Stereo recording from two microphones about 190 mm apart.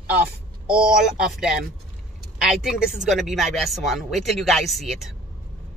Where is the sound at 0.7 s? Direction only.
5° right (ahead or behind).